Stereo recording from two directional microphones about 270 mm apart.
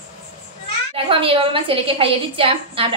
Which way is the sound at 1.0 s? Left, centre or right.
Centre.